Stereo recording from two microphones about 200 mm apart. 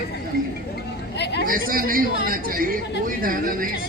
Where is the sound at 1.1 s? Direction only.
55° left (ahead or behind).